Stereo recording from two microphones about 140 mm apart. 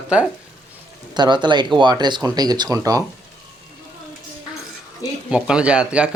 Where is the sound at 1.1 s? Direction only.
30° right (ahead or behind).